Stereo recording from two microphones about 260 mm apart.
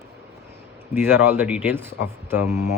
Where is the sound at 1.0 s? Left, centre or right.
Centre.